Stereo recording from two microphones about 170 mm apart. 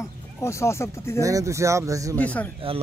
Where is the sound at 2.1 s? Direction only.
10° left (ahead or behind).